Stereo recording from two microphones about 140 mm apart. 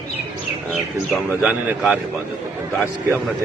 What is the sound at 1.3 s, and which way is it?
Speech, 15° right (ahead or behind).